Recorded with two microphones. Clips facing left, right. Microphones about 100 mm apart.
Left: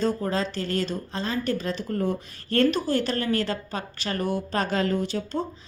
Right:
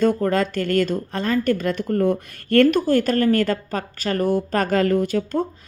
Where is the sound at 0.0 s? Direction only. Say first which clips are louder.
Right 7 dB; 55° right (ahead or behind).